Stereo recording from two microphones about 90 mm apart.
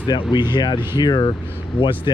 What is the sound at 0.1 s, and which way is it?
Speech, 55° left (ahead or behind).